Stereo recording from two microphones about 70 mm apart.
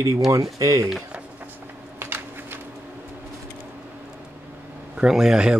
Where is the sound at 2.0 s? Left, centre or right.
Right.